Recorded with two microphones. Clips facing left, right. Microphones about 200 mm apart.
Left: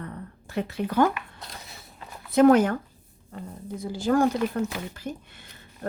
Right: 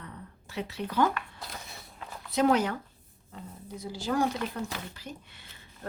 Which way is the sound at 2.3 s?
50° left (ahead or behind).